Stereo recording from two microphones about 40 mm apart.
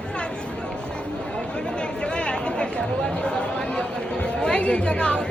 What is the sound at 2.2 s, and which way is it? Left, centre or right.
Chatter, left.